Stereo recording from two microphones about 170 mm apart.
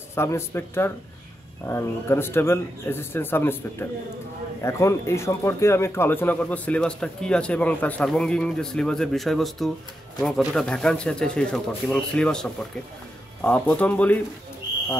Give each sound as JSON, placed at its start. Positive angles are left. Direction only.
{"t": 0.1, "sound": "speech", "side_deg": 15}
{"t": 4.6, "sound": "speech", "side_deg": 15}